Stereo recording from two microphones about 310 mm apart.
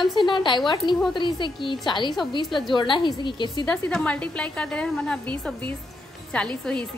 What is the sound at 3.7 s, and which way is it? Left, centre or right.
A woman's voice, centre.